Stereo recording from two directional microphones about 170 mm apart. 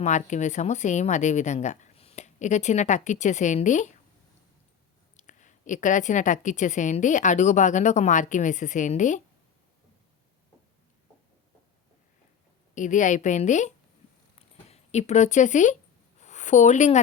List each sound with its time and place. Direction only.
0.0 s a woman's voice: 45° left (ahead or behind)
5.1 s a woman's voice: 45° left (ahead or behind)
12.7 s a woman's voice: 45° left (ahead or behind)
14.3 s zipper: 40° left (ahead or behind)
16.2 s a sound: 45° left (ahead or behind)